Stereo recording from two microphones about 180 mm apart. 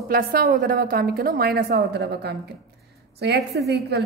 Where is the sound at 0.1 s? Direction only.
55° right (ahead or behind).